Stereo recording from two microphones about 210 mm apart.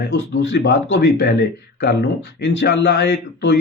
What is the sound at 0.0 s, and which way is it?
Speech, 55° left (ahead or behind).